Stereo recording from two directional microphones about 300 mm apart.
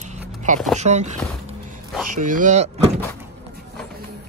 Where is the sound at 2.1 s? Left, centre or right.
Right.